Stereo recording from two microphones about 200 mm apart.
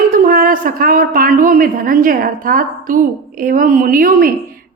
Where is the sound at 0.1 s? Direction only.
45° right (ahead or behind).